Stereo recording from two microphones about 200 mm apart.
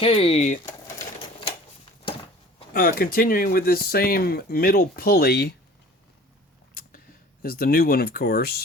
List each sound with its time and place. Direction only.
0.0 s speech: 30° left (ahead or behind)
2.7 s speech: 45° left (ahead or behind)
7.4 s speech: 50° left (ahead or behind)